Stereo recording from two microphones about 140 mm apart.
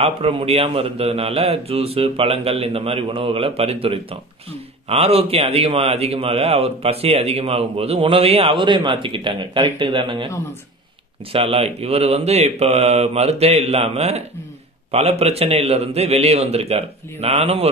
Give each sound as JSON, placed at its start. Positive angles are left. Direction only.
{"t": 0.0, "sound": "a man's voice", "side_deg": -45}
{"t": 11.3, "sound": "a man's voice", "side_deg": -45}